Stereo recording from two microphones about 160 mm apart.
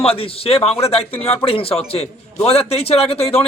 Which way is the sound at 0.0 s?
35° left (ahead or behind).